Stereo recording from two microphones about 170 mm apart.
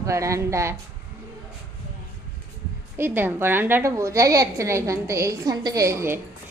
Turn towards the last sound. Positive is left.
turn(degrees=-15)  # may be behind; listen again after turning